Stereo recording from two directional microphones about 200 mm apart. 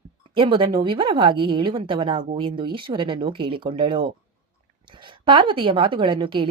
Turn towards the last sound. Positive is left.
turn(degrees=-25)  # may be behind; listen again after turning